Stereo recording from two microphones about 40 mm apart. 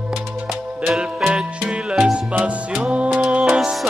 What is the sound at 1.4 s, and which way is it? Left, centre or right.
Music, centre.